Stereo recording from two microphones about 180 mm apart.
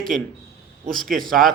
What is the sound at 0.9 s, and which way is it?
Speech, centre (ahead or behind).